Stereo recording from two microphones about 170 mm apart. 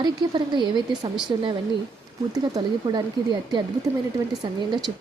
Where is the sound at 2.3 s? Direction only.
25° right (ahead or behind).